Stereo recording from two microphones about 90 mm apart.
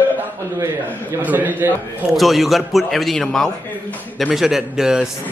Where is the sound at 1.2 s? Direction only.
20° right (ahead or behind).